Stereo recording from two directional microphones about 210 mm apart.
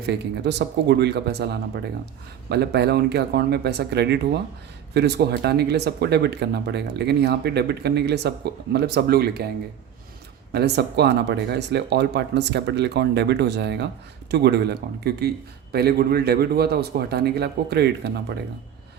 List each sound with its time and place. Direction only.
0.0 s speech: 50° right (ahead or behind)
10.5 s speech: 50° right (ahead or behind)